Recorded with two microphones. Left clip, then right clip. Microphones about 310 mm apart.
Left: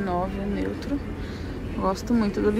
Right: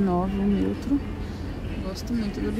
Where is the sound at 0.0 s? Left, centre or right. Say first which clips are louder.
Right 1 dB; right.